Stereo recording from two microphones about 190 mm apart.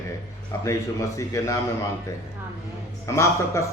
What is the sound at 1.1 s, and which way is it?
Speech, 15° left (ahead or behind).